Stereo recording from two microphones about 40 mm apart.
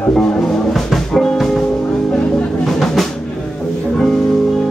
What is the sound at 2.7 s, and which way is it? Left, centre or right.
Music, centre.